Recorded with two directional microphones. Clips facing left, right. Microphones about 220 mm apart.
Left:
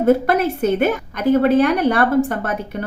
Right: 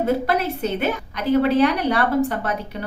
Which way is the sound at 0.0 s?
50° left (ahead or behind).